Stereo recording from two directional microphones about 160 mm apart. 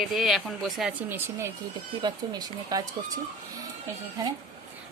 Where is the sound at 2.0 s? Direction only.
25° right (ahead or behind).